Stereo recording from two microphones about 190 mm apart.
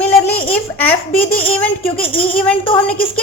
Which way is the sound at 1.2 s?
30° left (ahead or behind).